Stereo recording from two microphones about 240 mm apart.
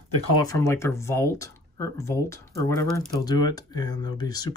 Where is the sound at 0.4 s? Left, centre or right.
Centre.